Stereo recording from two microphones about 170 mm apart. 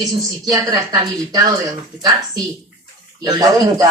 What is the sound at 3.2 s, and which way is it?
Speech, 25° right (ahead or behind).